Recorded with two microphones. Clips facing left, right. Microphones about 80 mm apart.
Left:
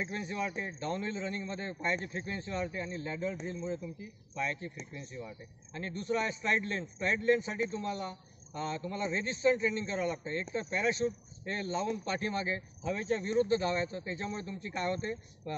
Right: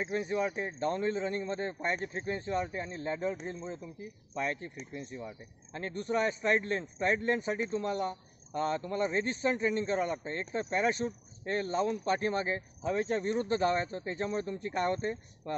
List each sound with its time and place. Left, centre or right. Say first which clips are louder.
0.0 s a man's voice: right 4 dB; right
15.0 s speech: right 3 dB; right